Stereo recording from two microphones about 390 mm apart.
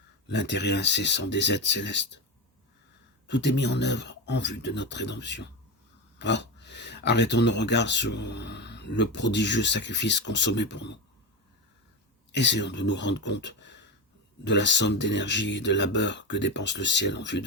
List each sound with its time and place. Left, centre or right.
0.3 s speech: left
3.2 s speech: left
12.3 s speech: left